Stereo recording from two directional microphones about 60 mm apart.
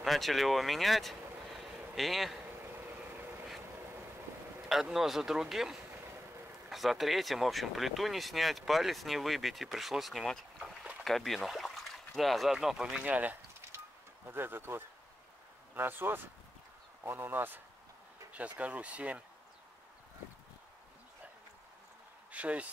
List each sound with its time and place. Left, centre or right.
0.0 s speech: centre
4.9 s speech: centre
13.0 s speech: right
14.2 s speech: right
18.3 s speech: right
22.3 s speech: right